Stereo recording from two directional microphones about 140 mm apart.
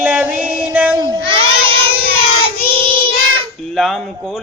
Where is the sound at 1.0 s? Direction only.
30° right (ahead or behind).